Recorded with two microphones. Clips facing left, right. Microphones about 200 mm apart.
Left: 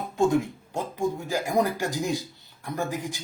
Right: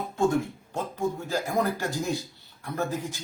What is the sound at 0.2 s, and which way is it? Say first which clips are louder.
A man's voice: left 2 dB; 15° left (ahead or behind).